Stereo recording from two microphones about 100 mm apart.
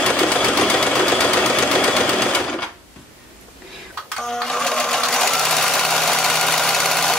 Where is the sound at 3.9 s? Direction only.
5° left (ahead or behind).